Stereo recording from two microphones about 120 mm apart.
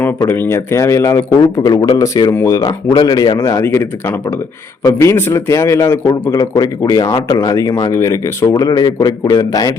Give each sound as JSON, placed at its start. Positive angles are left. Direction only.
{"t": 0.3, "sound": "a man's voice", "side_deg": 20}
{"t": 3.3, "sound": "a man's voice", "side_deg": 25}